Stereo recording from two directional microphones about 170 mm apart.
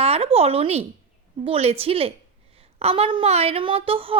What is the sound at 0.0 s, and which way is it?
A woman's voice, 35° right (ahead or behind).